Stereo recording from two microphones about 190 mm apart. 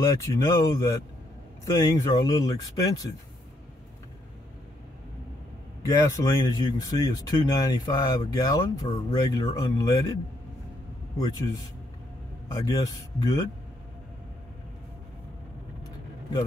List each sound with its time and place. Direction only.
0.0 s speech: 15° left (ahead or behind)
5.8 s speech: 15° left (ahead or behind)
11.1 s speech: 20° left (ahead or behind)